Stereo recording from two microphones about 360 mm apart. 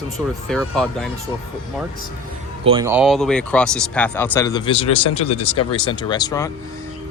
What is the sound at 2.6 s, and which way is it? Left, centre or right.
Speech, centre.